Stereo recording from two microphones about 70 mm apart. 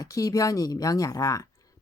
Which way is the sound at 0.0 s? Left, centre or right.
Left.